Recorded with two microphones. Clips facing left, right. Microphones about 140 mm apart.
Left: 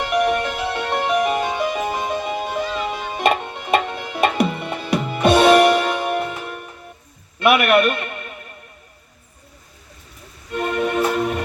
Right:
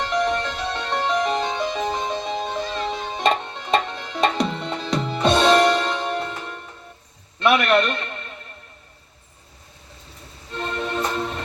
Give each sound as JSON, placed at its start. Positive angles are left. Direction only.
{"t": 0.0, "sound": "music", "side_deg": 10}
{"t": 7.3, "sound": "a sound", "side_deg": 10}
{"t": 10.5, "sound": "music", "side_deg": 10}